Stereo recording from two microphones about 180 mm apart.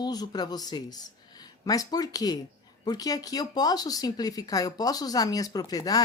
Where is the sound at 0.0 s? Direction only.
20° left (ahead or behind).